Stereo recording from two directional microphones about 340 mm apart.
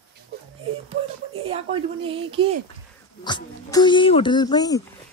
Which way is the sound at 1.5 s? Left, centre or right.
Centre.